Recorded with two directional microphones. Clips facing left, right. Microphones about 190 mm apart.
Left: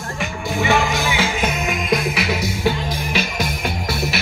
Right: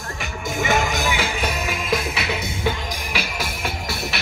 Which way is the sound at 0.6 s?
45° right (ahead or behind).